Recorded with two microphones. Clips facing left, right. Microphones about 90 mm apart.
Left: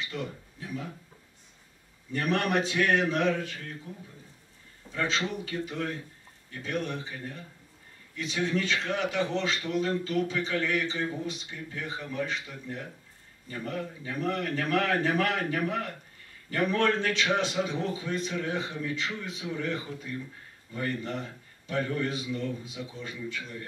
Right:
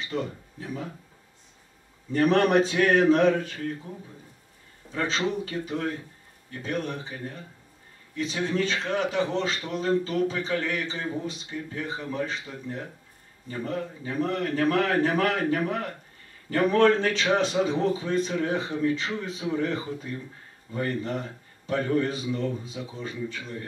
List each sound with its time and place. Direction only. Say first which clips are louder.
0.1 s a man's voice: right 5 dB; 35° right (ahead or behind)
2.1 s a man's voice: right 7 dB; 35° right (ahead or behind)
4.9 s a man's voice: right 3 dB; 35° right (ahead or behind)